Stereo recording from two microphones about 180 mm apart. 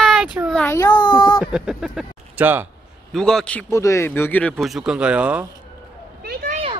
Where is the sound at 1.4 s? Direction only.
5° right (ahead or behind).